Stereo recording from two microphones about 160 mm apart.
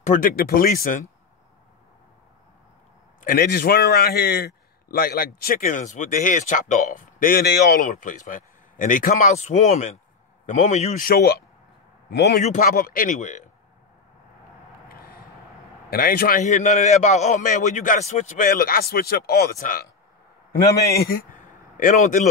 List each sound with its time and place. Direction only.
0.0 s a man's voice: 55° left (ahead or behind)
3.3 s a man's voice: 85° left; by 11.1 s 45° left (ahead or behind)
11.1 s speech: 80° left
12.1 s a man's voice: 90° left
12.4 s a man's voice: 60° left (ahead or behind)
14.9 s a sound: 65° left (ahead or behind)
15.9 s a man's voice: 70° left (ahead or behind)
19.6 s a man's voice: 60° left (ahead or behind)
20.9 s speech: 75° left (ahead or behind)
21.7 s a man's voice: 55° left (ahead or behind)